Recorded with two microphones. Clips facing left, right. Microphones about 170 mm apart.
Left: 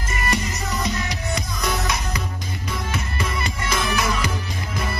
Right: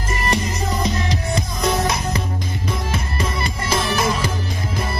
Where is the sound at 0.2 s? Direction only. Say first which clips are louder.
Right 2 dB; 25° right (ahead or behind).